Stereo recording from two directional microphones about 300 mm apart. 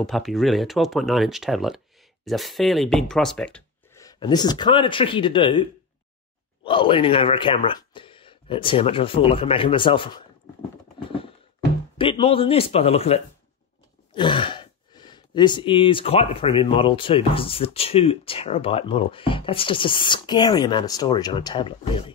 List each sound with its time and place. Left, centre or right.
0.0 s speech: centre
11.0 s a sound: centre
12.0 s speech: centre